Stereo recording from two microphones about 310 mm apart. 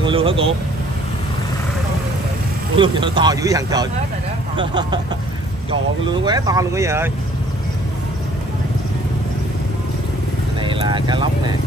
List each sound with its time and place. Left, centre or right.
0.0 s speech: centre
2.8 s speech: centre
6.2 s speech: centre
10.6 s speech: centre